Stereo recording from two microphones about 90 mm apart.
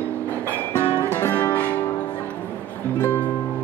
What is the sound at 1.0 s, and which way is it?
Music, 25° left (ahead or behind).